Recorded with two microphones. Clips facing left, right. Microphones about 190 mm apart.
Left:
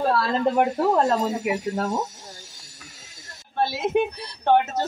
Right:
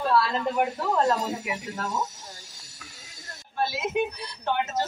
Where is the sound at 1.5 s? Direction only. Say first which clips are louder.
Left 7 dB; 40° left (ahead or behind).